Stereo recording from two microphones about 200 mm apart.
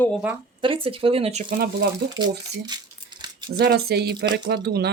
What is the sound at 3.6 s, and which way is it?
Speech, 55° right (ahead or behind).